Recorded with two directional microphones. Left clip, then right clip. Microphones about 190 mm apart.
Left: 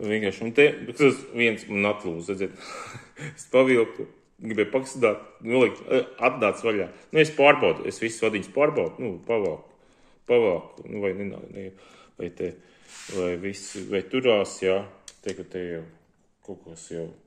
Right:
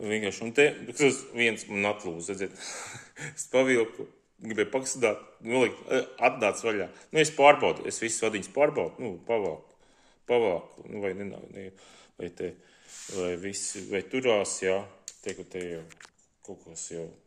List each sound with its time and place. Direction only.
0.0 s speech: centre (ahead or behind)